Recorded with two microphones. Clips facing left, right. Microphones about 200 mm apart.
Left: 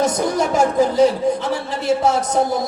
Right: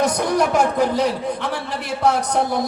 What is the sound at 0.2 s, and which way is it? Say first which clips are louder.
A man's voice: left 1 dB; 60° right (ahead or behind).